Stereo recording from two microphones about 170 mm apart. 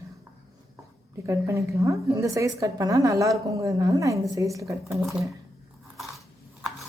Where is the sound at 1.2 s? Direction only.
15° right (ahead or behind).